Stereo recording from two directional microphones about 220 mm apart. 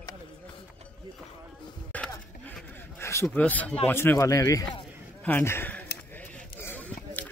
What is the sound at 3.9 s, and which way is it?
Speech, 10° left (ahead or behind).